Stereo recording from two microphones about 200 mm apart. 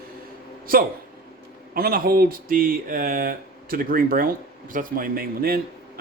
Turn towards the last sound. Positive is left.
turn(degrees=-50)  # may be behind; listen again after turning